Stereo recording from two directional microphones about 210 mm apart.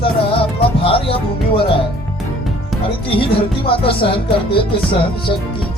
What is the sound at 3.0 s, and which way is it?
Speech, 25° left (ahead or behind).